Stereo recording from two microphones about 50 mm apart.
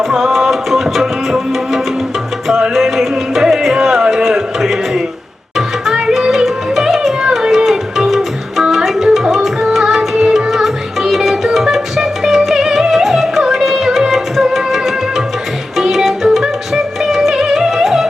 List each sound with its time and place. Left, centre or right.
0.1 s music: centre
8.7 s tabla: centre
9.1 s music: centre